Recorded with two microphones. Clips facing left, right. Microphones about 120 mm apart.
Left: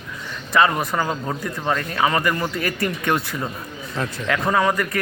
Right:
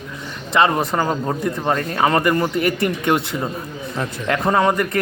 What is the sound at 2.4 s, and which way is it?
Speech, 25° right (ahead or behind).